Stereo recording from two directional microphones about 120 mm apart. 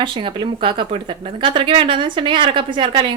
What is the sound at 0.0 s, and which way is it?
A woman's voice, 45° right (ahead or behind).